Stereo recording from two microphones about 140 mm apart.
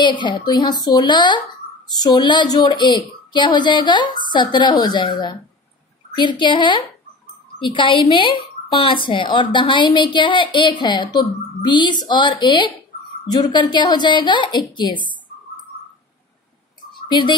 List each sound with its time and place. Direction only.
0.0 s a woman's voice: 35° left (ahead or behind)
17.1 s a woman's voice: 30° left (ahead or behind)